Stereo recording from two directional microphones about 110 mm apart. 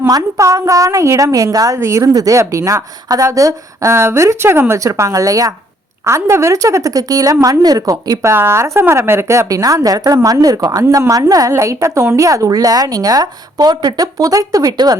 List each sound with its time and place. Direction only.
0.1 s a woman's voice: 30° right (ahead or behind)
8.3 s a woman's voice: 20° right (ahead or behind)